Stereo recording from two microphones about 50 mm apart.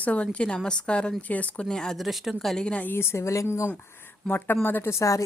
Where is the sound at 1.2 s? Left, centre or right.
Left.